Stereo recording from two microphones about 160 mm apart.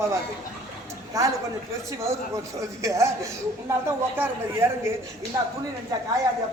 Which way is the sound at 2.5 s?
20° right (ahead or behind).